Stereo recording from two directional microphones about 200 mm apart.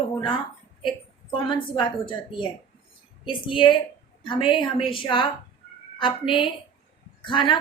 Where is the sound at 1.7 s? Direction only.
25° left (ahead or behind).